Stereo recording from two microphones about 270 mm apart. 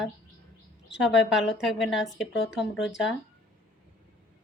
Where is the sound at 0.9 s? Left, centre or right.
Centre.